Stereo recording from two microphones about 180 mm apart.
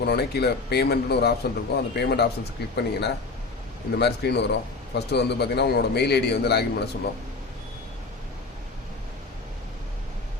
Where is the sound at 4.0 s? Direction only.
65° left (ahead or behind).